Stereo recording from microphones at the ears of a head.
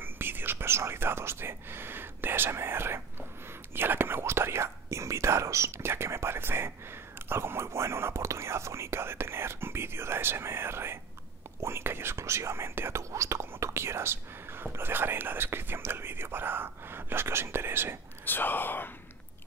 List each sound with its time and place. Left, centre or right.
0.0 s whispering: right
3.7 s speech: right